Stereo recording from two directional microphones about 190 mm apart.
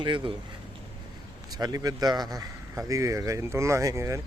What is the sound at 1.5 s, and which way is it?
Speech, 20° right (ahead or behind).